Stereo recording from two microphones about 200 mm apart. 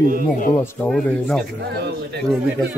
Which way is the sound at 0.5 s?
10° left (ahead or behind).